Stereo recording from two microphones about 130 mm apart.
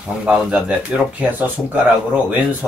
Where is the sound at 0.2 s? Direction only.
10° right (ahead or behind).